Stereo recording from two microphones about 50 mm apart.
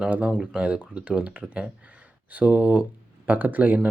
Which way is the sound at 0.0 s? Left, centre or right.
Right.